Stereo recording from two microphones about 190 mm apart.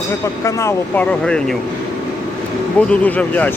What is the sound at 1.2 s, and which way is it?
Speech, 5° left (ahead or behind).